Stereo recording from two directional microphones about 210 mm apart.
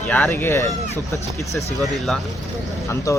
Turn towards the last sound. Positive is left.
turn(degrees=15)  # may be behind; listen again after turning